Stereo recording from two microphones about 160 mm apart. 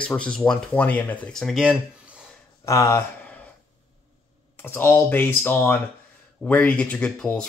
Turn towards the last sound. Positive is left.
turn(degrees=5)  # may be behind; listen again after turning